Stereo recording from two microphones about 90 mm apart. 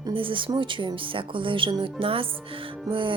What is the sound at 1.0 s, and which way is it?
Speech, 75° right (ahead or behind).